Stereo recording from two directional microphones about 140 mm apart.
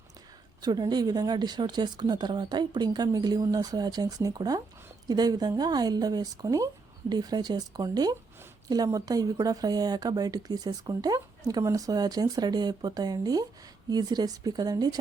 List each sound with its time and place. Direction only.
0.6 s speech: 30° right (ahead or behind)